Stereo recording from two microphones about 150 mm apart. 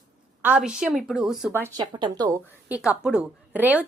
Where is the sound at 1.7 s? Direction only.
30° right (ahead or behind).